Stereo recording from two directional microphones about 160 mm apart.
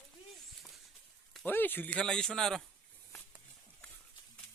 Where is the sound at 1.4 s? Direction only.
10° left (ahead or behind).